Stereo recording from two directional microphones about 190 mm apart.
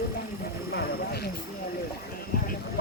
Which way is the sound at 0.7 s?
55° left (ahead or behind).